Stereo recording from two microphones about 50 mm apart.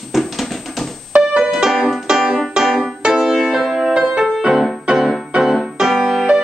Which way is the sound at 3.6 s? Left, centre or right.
Centre.